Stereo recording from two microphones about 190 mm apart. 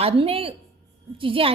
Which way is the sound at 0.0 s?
30° right (ahead or behind).